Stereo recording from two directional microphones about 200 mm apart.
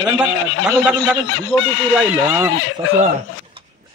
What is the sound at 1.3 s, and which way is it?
Speech, 75° left (ahead or behind).